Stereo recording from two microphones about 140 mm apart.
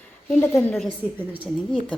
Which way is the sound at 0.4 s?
15° left (ahead or behind).